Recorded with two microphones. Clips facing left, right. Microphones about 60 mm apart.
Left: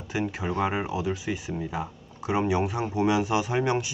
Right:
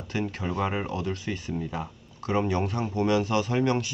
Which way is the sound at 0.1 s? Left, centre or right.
Centre.